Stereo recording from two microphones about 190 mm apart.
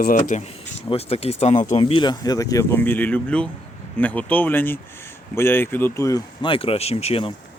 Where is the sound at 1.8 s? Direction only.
25° left (ahead or behind).